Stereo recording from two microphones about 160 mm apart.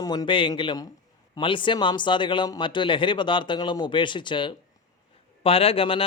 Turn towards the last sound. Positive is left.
turn(degrees=35)  # may be behind; listen again after turning